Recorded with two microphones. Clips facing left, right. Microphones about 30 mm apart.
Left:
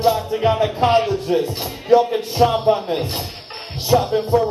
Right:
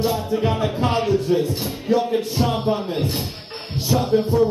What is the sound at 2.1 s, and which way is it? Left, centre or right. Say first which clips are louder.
Speech: left 4 dB; centre.